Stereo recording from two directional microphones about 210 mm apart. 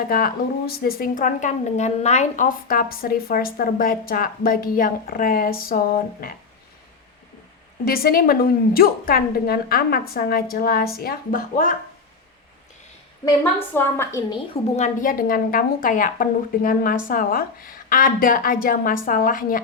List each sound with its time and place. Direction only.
0.1 s speech: 45° left (ahead or behind)
7.9 s speech: 45° left (ahead or behind)
13.2 s a woman's voice: 10° left (ahead or behind)
14.5 s a woman's voice: 35° left (ahead or behind)